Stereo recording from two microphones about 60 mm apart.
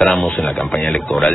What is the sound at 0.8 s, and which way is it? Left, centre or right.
Speech, centre.